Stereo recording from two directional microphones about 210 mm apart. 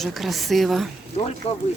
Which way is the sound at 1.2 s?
30° left (ahead or behind).